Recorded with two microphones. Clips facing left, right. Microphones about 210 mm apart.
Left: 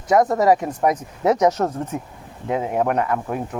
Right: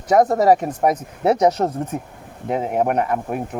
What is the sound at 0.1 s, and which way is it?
Speech, 35° right (ahead or behind).